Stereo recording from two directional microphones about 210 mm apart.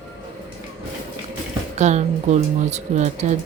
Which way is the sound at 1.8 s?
35° right (ahead or behind).